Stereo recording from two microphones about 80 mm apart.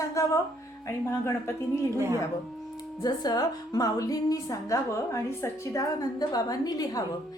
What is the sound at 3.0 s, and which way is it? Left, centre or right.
A woman's voice, left.